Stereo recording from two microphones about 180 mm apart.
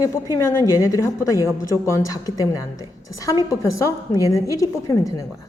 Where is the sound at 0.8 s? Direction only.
15° left (ahead or behind).